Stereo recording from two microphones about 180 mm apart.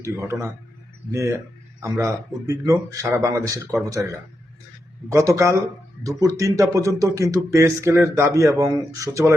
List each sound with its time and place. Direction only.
0.3 s speech: 15° right (ahead or behind)